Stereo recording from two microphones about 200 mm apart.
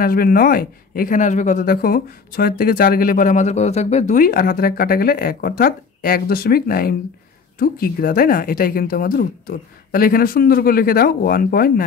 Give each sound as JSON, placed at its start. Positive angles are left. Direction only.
{"t": 0.0, "sound": "speech", "side_deg": 45}